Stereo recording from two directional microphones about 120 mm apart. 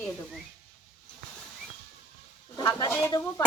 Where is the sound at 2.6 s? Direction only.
30° left (ahead or behind).